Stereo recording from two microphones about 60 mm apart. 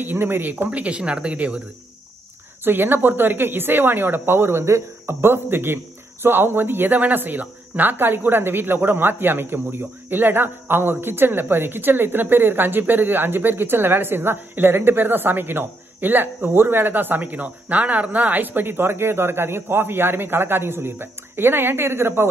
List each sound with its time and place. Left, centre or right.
0.0 s speech: right
0.7 s speech: right
2.6 s speech: right